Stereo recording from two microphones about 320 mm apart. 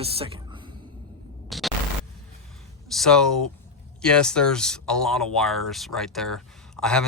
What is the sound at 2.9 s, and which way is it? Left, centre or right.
Speech, centre.